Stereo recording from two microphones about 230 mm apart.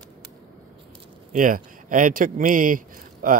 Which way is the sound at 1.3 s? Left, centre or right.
Right.